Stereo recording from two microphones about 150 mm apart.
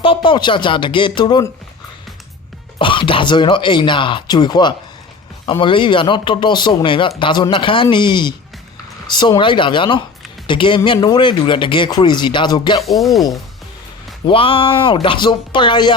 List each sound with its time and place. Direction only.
0.0 s speech: 35° left (ahead or behind)
2.7 s speech: 35° left (ahead or behind)
12.8 s speech: centre (ahead or behind)
14.3 s speech: 35° left (ahead or behind)